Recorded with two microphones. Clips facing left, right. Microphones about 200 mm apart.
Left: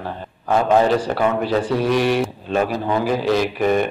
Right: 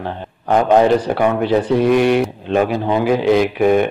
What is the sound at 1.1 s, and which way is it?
Speech, 10° right (ahead or behind).